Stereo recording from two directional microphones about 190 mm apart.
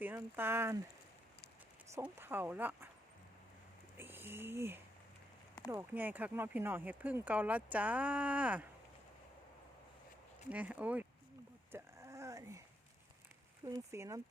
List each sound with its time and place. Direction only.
0.0 s speech: 10° right (ahead or behind)
2.0 s speech: 10° right (ahead or behind)
3.9 s a sound: 10° right (ahead or behind)
5.6 s speech: 10° right (ahead or behind)
10.5 s speech: 10° right (ahead or behind)
11.7 s a sound: 15° right (ahead or behind)
13.7 s speech: 15° right (ahead or behind)